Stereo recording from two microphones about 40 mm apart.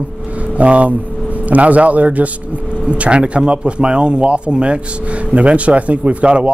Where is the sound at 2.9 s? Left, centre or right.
Right.